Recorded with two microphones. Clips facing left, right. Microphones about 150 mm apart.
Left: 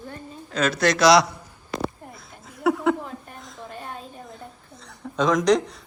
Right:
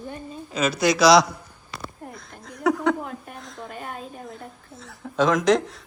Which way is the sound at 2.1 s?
5° left (ahead or behind).